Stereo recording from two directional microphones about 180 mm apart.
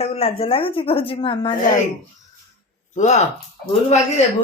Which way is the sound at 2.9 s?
40° left (ahead or behind).